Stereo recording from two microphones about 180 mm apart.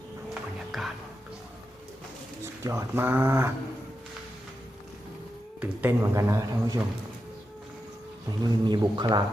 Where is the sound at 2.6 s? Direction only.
15° right (ahead or behind).